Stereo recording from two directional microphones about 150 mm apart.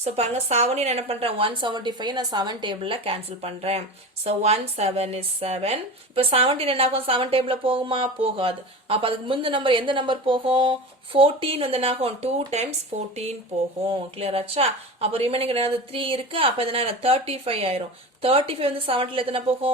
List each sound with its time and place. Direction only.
0.0 s speech: 45° right (ahead or behind)